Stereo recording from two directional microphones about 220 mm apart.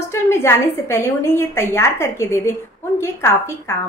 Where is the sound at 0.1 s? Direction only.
10° left (ahead or behind).